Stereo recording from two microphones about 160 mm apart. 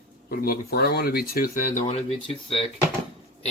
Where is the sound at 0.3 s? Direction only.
65° left (ahead or behind).